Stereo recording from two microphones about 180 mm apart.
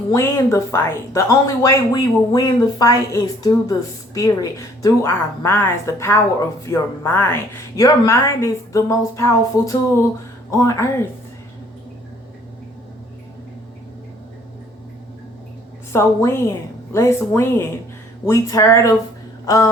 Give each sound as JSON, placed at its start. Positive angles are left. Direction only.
{"t": 0.1, "sound": "speech", "side_deg": 15}
{"t": 15.9, "sound": "speech", "side_deg": 15}